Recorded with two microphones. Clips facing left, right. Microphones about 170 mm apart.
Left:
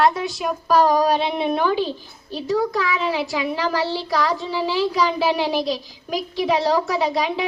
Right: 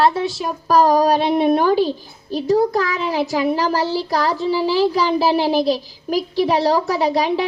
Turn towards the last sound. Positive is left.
turn(degrees=-40)  # may be behind; listen again after turning